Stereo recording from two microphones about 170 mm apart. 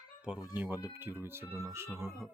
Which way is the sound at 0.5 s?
10° right (ahead or behind).